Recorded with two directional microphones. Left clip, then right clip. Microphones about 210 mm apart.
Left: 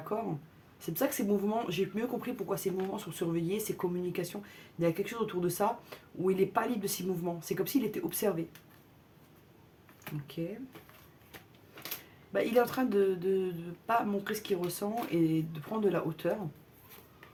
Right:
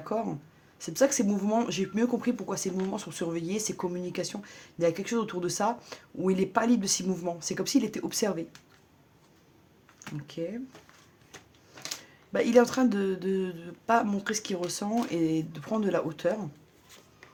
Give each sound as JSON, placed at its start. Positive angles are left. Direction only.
{"t": 0.8, "sound": "speech", "side_deg": -40}
{"t": 12.3, "sound": "speech", "side_deg": -45}